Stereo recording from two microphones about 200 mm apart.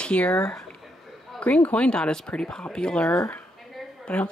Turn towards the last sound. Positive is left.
turn(degrees=5)  # may be behind; listen again after turning